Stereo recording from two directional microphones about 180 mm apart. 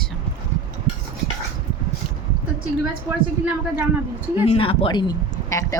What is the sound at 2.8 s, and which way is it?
A woman's voice, 10° right (ahead or behind).